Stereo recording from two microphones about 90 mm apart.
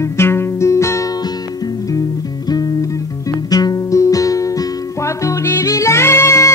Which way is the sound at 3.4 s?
45° left (ahead or behind).